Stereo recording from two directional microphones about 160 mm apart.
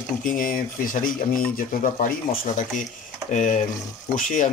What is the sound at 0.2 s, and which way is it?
Speech, 55° left (ahead or behind).